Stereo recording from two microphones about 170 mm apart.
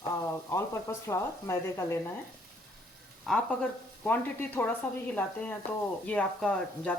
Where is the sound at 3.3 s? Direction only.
Centre (ahead or behind).